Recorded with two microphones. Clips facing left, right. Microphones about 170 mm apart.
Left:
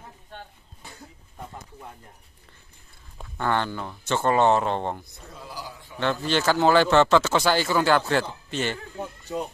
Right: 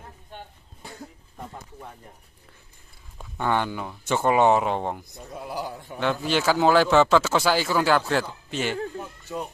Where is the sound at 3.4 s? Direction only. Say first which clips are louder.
Right 1 dB; 15° right (ahead or behind).